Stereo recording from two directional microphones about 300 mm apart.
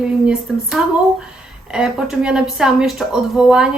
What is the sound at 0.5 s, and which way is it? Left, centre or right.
Speech, centre.